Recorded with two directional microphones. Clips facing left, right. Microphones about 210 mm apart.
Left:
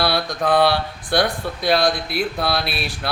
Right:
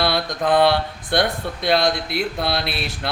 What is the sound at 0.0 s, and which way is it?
Speech, 20° right (ahead or behind).